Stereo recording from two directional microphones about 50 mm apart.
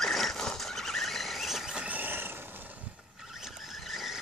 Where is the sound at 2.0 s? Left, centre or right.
Right.